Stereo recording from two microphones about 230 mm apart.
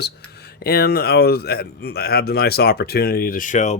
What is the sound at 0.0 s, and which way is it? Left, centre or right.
Speech, left.